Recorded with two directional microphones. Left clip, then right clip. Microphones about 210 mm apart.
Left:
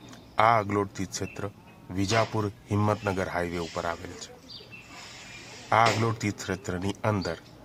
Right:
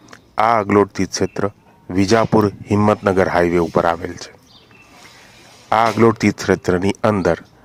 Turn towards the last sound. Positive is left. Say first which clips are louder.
# right 13 dB
turn(degrees=-40)  # may be behind; listen again after turning